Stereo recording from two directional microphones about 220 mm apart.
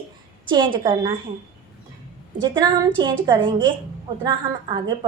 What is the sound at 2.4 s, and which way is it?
A woman's voice, 20° right (ahead or behind).